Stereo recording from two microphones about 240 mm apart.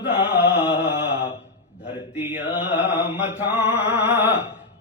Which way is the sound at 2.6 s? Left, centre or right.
Centre.